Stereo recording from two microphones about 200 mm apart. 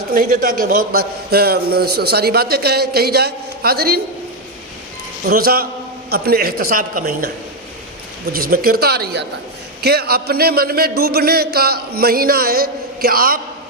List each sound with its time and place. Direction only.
0.1 s a man's voice: 45° right (ahead or behind)
5.2 s a man's voice: 50° right (ahead or behind)
8.3 s a man's voice: 45° right (ahead or behind)